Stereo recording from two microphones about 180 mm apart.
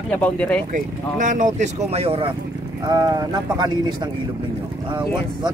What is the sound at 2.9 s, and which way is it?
Speech, 20° right (ahead or behind).